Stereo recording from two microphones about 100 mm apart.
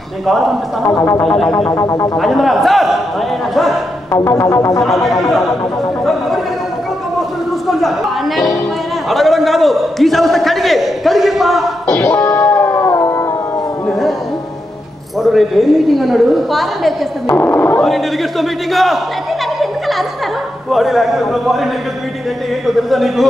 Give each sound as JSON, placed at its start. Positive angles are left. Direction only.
{"t": 1.7, "sound": "music", "side_deg": 35}
{"t": 2.1, "sound": "a man's voice", "side_deg": 0}
{"t": 4.1, "sound": "music", "side_deg": 30}
{"t": 4.8, "sound": "a man's voice", "side_deg": 0}
{"t": 7.2, "sound": "a sound", "side_deg": 0}
{"t": 9.1, "sound": "a man's voice", "side_deg": 0}
{"t": 12.0, "sound": "music", "side_deg": 30}
{"t": 15.2, "sound": "a man's voice", "side_deg": 0}
{"t": 17.4, "sound": "speech", "side_deg": 25}
{"t": 17.8, "sound": "a man's voice", "side_deg": 0}
{"t": 20.7, "sound": "a man's voice", "side_deg": 0}
{"t": 22.7, "sound": "a man's voice", "side_deg": 0}